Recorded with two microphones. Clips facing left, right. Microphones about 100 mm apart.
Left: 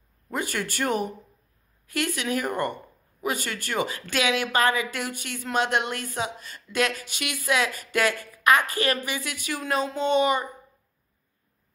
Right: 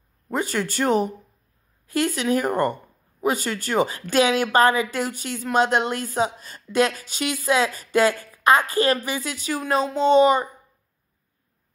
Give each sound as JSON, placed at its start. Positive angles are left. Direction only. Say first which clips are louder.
{"t": 0.3, "sound": "a woman's voice", "louder": "right 5 dB", "side_deg": -30}